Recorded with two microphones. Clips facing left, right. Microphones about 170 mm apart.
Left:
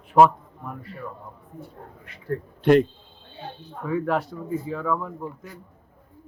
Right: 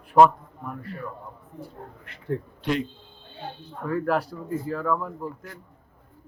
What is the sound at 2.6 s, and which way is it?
Speech, 55° left (ahead or behind).